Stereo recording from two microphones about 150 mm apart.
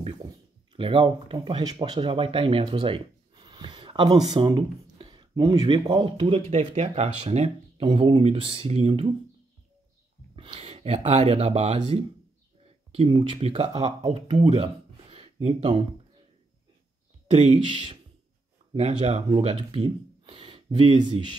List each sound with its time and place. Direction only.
0.7 s speech: 35° right (ahead or behind)
10.3 s a sound: 40° right (ahead or behind)
11.1 s speech: 50° right (ahead or behind)
14.4 s a sound: 35° right (ahead or behind)
15.4 s speech: 35° right (ahead or behind)
17.3 s speech: 40° right (ahead or behind)
18.8 s speech: 45° right (ahead or behind)
19.3 s speech: 35° right (ahead or behind)